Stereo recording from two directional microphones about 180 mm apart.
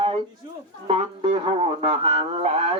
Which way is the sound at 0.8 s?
35° right (ahead or behind).